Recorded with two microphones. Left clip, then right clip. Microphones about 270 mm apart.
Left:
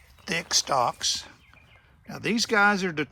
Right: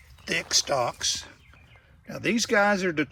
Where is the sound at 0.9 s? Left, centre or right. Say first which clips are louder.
Left 1 dB; centre.